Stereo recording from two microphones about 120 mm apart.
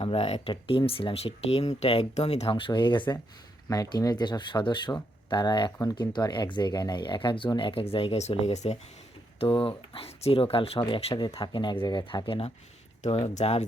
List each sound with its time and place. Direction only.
0.0 s speech: 55° left (ahead or behind)
0.5 s speech: 50° left (ahead or behind)
3.7 s speech: 30° left (ahead or behind); by 8.8 s 70° left (ahead or behind)
9.4 s speech: 50° left (ahead or behind)
13.3 s speech: 70° left (ahead or behind)